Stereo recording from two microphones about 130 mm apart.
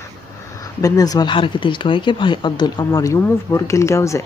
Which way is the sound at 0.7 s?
30° left (ahead or behind).